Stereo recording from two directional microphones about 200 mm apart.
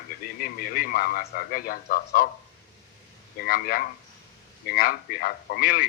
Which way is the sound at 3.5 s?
45° left (ahead or behind).